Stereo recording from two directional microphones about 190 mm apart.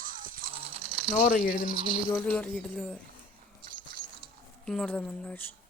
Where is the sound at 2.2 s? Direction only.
5° left (ahead or behind).